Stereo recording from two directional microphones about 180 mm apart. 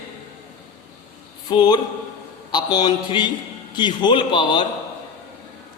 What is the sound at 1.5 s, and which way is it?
A man's voice, 25° left (ahead or behind).